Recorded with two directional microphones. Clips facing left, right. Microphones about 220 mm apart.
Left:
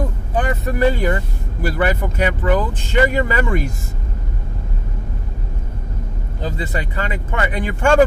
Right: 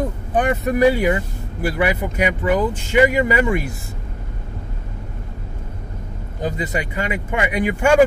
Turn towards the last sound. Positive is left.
turn(degrees=-10)  # may be behind; listen again after turning